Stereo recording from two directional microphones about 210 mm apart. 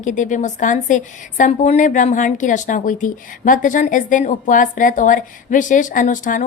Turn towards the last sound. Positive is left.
turn(degrees=40)  # may be behind; listen again after turning